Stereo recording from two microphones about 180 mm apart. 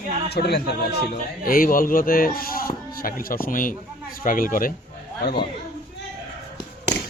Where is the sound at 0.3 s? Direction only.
65° left (ahead or behind).